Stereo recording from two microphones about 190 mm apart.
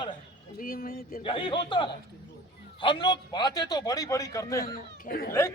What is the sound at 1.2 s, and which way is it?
A man's voice, 25° left (ahead or behind).